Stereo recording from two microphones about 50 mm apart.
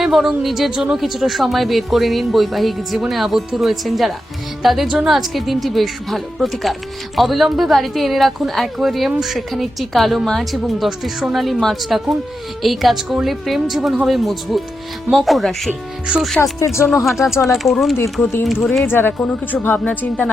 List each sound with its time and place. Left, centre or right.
0.0 s speech: centre
16.4 s speech: left
16.8 s speech: centre
18.9 s speech: left